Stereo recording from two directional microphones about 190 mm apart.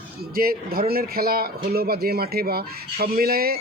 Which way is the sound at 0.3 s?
50° right (ahead or behind).